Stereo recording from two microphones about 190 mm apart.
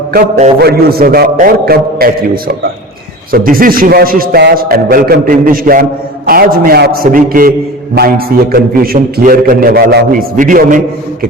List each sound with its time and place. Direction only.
0.6 s a man's voice: 55° right (ahead or behind)
8.5 s a man's voice: 50° right (ahead or behind)